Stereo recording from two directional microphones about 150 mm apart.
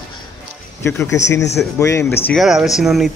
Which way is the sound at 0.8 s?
20° left (ahead or behind).